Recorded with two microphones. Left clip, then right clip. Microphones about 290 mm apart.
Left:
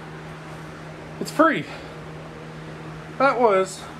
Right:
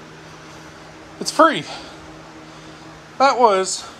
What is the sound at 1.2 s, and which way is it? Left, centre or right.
Speech, centre.